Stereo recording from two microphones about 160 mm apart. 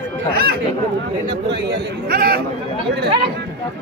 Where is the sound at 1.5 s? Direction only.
85° right.